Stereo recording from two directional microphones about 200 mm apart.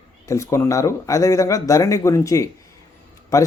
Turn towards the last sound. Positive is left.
turn(degrees=15)  # may be behind; listen again after turning